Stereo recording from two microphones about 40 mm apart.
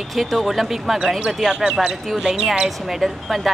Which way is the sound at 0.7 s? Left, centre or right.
Centre.